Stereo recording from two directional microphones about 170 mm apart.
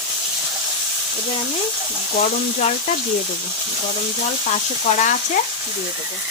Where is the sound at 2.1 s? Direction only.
45° left (ahead or behind).